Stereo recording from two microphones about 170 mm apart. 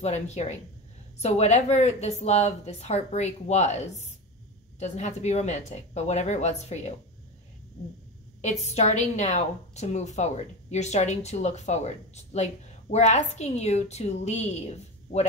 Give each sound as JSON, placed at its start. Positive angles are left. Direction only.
{"t": 0.0, "sound": "a woman's voice", "side_deg": 40}
{"t": 8.4, "sound": "a woman's voice", "side_deg": 40}